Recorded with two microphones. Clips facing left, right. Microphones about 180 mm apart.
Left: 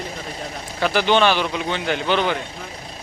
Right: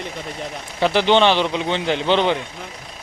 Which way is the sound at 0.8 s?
20° right (ahead or behind).